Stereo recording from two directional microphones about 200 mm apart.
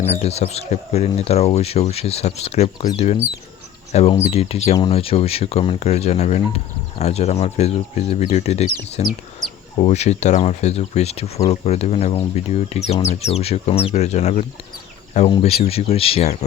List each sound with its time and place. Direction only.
0.0 s speech: 30° left (ahead or behind)